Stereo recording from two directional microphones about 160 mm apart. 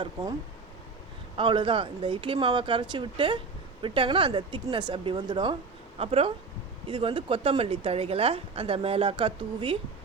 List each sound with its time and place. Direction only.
0.0 s speech: 20° right (ahead or behind)
1.4 s a woman's voice: 30° right (ahead or behind)
6.0 s a woman's voice: 40° right (ahead or behind)